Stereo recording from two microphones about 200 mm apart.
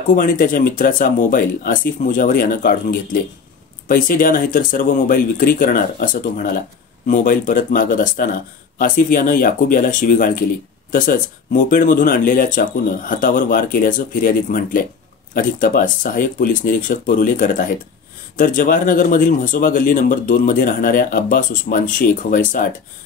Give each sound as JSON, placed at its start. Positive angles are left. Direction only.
{"t": 0.1, "sound": "speech", "side_deg": 45}